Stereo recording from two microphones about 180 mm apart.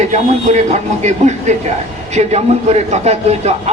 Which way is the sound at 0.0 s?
40° right (ahead or behind).